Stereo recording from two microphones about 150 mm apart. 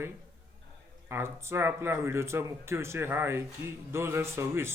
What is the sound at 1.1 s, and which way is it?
Speech, 15° right (ahead or behind).